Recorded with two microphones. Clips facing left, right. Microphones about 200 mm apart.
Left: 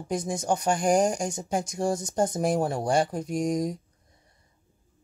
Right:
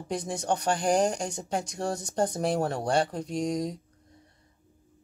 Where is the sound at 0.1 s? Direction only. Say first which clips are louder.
Left 3 dB; 45° left (ahead or behind).